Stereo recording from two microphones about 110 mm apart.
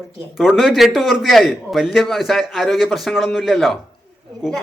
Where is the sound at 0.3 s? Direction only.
Centre (ahead or behind).